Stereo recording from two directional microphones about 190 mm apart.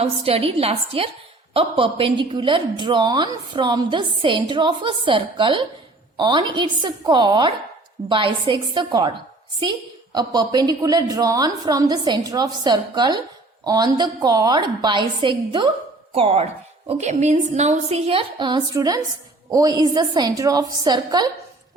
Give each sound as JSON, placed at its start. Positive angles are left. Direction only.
{"t": 0.0, "sound": "a woman's voice", "side_deg": -30}